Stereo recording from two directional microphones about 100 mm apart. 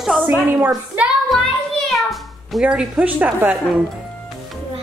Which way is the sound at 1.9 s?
Centre (ahead or behind).